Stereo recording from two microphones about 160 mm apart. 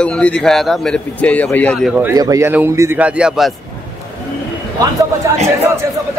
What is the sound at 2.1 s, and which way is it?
Speech, 20° right (ahead or behind).